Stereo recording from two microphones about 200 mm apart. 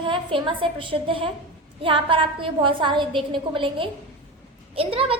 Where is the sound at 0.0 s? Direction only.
25° right (ahead or behind).